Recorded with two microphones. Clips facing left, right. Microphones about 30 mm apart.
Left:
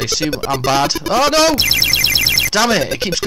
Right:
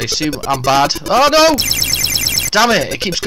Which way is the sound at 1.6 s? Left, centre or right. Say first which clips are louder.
Left 3 dB; left.